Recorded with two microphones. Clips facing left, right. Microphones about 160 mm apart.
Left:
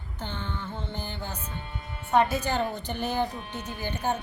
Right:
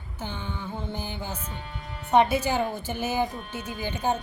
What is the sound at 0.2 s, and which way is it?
A woman's voice, 10° right (ahead or behind).